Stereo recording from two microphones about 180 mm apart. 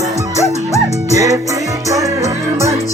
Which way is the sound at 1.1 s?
15° right (ahead or behind).